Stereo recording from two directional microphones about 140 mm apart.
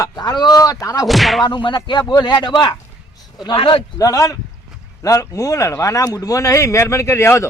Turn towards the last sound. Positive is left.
turn(degrees=20)  # may be behind; listen again after turning